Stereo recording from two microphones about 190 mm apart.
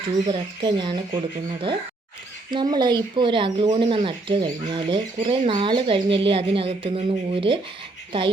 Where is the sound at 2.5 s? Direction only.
25° right (ahead or behind).